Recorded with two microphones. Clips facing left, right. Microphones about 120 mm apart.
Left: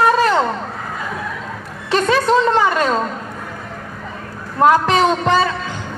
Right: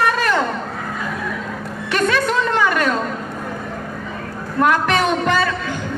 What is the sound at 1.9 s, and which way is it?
A woman's voice, 30° left (ahead or behind).